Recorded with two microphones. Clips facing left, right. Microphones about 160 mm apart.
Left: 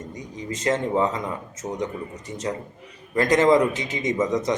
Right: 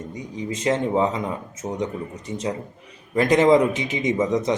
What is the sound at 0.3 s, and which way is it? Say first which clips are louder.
A man's voice: right 2 dB; 15° right (ahead or behind).